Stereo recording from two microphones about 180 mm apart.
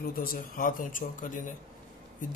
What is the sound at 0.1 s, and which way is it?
A man's voice, 55° left (ahead or behind).